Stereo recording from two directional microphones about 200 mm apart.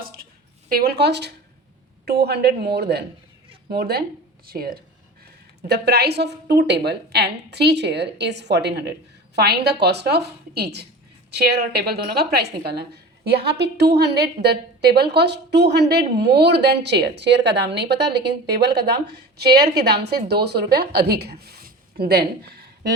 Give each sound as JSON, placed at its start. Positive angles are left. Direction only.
{"t": 0.7, "sound": "a woman's voice", "side_deg": -50}